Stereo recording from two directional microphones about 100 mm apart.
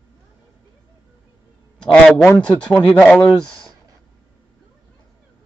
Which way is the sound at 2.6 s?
10° left (ahead or behind).